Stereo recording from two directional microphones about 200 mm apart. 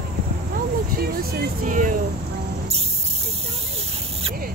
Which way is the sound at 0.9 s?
45° right (ahead or behind).